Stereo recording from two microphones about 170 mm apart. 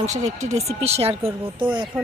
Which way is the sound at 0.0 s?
45° right (ahead or behind).